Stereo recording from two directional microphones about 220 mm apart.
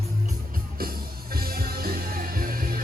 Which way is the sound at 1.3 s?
40° right (ahead or behind).